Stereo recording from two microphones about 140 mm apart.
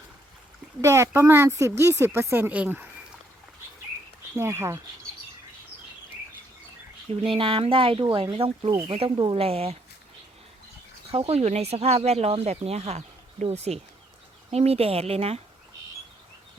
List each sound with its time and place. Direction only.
0.8 s speech: 20° right (ahead or behind)
4.4 s speech: 20° right (ahead or behind)
7.3 s speech: 40° right (ahead or behind)
11.1 s speech: 50° right (ahead or behind)